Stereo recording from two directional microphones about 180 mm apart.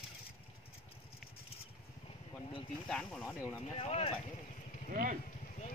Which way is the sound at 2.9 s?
5° left (ahead or behind).